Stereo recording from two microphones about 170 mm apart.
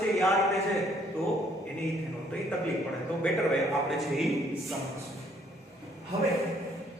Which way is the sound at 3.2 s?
Centre (ahead or behind).